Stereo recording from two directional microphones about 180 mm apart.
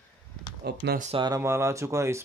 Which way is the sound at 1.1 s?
20° right (ahead or behind).